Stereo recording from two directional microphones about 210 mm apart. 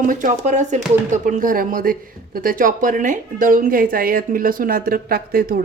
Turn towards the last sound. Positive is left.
turn(degrees=-45)  # may be behind; listen again after turning